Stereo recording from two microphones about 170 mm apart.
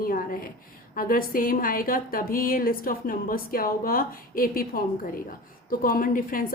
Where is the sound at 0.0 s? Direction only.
55° left (ahead or behind).